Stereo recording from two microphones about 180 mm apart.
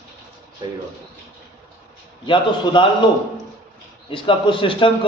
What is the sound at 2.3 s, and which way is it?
Speech, 25° left (ahead or behind).